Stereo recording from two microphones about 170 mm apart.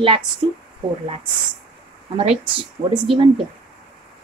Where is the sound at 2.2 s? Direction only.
30° right (ahead or behind).